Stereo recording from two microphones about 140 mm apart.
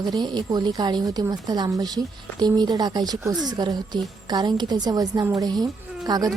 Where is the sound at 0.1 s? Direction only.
30° right (ahead or behind).